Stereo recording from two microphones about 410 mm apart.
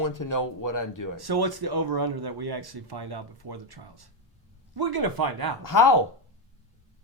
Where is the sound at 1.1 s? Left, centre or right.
Right.